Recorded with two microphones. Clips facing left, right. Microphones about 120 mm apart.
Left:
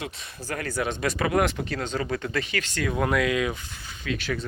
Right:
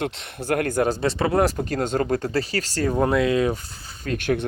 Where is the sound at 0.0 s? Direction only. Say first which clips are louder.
Right 8 dB; 65° right (ahead or behind).